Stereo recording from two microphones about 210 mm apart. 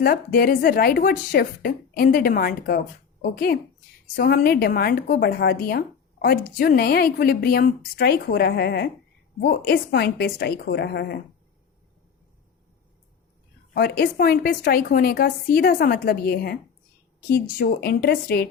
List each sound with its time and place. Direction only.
0.0 s speech: 45° left (ahead or behind)
13.7 s speech: 45° left (ahead or behind)
17.6 s speech: 45° left (ahead or behind)